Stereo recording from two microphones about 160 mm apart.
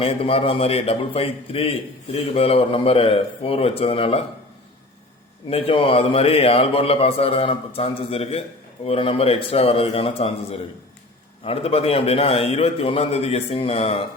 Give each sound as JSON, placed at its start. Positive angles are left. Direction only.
{"t": 0.0, "sound": "a man's voice", "side_deg": 35}
{"t": 5.5, "sound": "a man's voice", "side_deg": 35}